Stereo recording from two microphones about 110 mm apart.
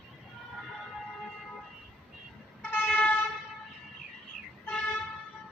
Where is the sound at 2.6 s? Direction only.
15° left (ahead or behind).